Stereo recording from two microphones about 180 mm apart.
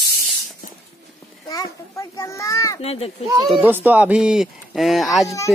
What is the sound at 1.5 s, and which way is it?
Children playing, 20° left (ahead or behind).